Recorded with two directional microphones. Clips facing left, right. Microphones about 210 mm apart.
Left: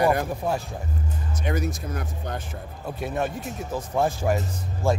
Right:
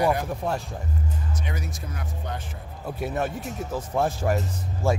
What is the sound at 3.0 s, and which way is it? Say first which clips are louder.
A man's voice: even; 5° right (ahead or behind).